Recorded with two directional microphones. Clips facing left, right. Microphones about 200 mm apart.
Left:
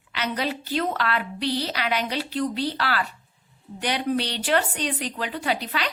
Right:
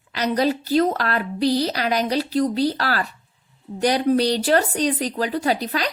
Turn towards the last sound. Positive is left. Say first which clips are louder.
# right 5 dB
turn(degrees=-40)  # may be behind; listen again after turning